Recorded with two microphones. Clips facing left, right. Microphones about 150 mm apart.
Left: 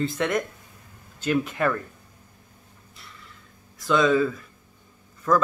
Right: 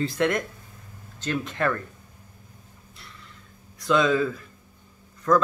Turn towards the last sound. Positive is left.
turn(degrees=5)  # may be behind; listen again after turning